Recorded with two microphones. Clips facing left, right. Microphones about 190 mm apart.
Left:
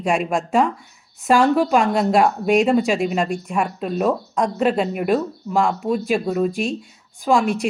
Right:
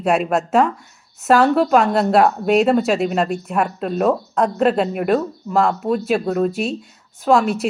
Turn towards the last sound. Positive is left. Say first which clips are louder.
# right 2 dB
turn(degrees=-5)  # may be behind; listen again after turning